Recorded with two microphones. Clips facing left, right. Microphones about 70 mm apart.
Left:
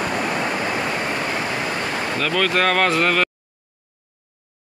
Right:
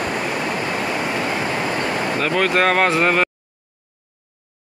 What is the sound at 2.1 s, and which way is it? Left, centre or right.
Speech, centre.